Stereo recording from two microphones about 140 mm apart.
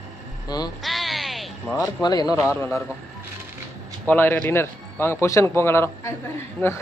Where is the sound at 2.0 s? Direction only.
30° left (ahead or behind).